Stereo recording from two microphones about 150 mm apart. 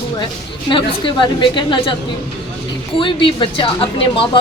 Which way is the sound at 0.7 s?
30° left (ahead or behind).